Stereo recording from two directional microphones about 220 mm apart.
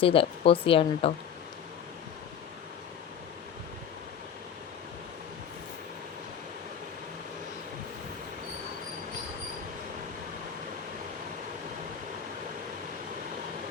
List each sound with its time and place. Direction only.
0.0 s speech: 25° left (ahead or behind)